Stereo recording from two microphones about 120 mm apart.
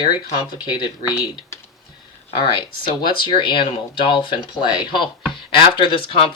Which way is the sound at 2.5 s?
45° left (ahead or behind).